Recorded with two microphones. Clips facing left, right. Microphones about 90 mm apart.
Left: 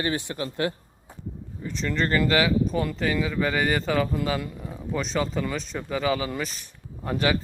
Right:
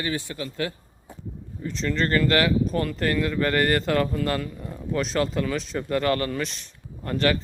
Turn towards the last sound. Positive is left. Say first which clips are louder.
# right 1 dB
turn(degrees=10)  # may be behind; listen again after turning